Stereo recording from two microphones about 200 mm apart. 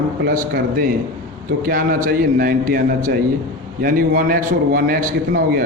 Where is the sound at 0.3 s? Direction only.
50° right (ahead or behind).